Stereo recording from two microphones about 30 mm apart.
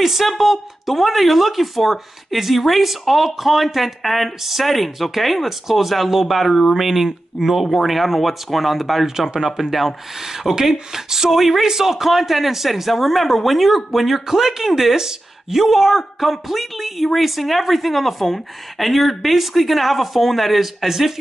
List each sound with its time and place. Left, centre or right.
0.0 s a woman's voice: centre
10.3 s a woman's voice: centre
20.8 s speech: centre